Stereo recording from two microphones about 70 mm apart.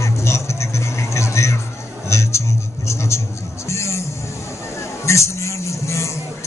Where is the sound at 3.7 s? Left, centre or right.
Left.